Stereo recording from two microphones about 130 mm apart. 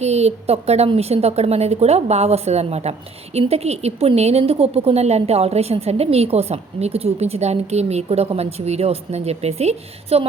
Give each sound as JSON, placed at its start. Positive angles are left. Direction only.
{"t": 0.0, "sound": "a woman's voice", "side_deg": -55}